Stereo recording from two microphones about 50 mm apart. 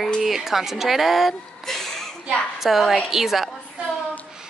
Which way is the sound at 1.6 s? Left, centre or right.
Centre.